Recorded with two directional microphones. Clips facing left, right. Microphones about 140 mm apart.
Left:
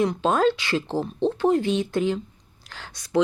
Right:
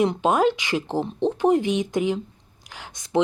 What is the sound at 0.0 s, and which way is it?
Speech, 15° right (ahead or behind).